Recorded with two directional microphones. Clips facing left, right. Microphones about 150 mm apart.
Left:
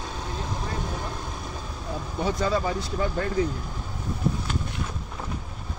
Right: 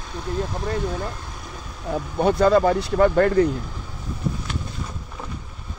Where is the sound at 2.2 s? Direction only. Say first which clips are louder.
Right 9 dB; 60° right (ahead or behind).